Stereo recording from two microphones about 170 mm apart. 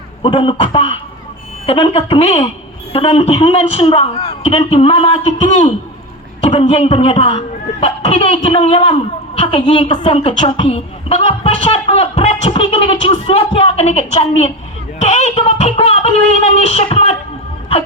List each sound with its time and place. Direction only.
0.2 s speech: 30° left (ahead or behind)